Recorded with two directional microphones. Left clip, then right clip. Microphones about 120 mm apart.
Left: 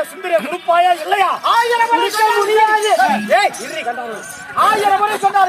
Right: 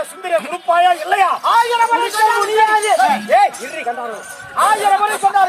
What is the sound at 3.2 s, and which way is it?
Speech, 35° left (ahead or behind).